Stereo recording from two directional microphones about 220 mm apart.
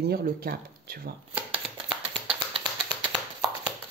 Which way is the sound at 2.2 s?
25° right (ahead or behind).